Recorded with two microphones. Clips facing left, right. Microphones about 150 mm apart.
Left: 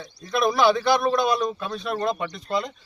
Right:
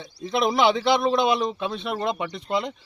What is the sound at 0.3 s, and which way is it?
Speech, 20° right (ahead or behind).